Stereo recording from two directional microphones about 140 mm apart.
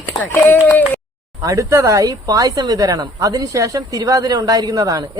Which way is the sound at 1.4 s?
25° right (ahead or behind).